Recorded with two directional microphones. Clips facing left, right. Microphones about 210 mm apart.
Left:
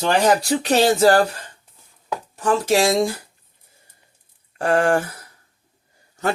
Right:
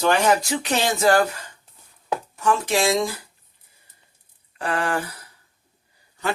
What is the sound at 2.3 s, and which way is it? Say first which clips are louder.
Speech: left 4 dB; 35° left (ahead or behind).